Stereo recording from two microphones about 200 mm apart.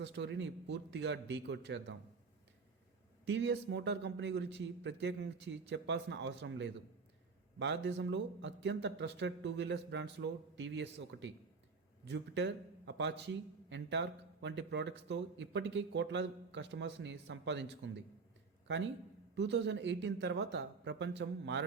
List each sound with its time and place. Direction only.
0.0 s a man's voice: 65° right (ahead or behind)
3.2 s a man's voice: 60° right (ahead or behind)
19.4 s a man's voice: 60° right (ahead or behind)